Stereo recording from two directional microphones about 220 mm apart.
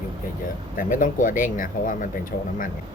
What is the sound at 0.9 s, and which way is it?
Speech, 35° left (ahead or behind).